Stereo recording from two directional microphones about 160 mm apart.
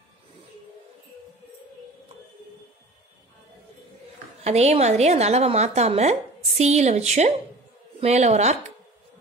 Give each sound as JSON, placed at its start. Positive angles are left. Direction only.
{"t": 4.4, "sound": "a woman's voice", "side_deg": -40}